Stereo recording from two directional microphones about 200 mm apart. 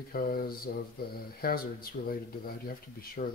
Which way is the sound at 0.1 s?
50° left (ahead or behind).